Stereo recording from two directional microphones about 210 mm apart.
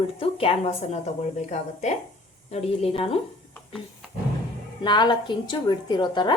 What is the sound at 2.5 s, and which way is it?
Speech, 25° left (ahead or behind).